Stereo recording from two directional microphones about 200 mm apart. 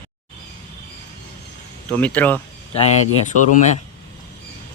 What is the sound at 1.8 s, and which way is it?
Speech, 5° left (ahead or behind).